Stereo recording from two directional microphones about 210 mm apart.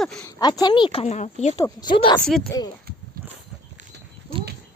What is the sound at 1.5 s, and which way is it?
Speech, 20° left (ahead or behind).